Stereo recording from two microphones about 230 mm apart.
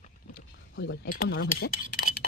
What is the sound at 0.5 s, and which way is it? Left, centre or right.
Speech, left.